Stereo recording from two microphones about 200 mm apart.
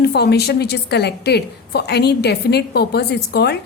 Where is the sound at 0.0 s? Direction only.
55° left (ahead or behind).